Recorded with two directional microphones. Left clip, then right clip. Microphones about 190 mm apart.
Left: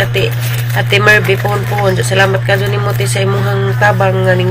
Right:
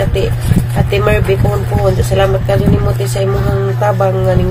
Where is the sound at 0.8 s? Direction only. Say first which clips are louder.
Left 5 dB; centre (ahead or behind).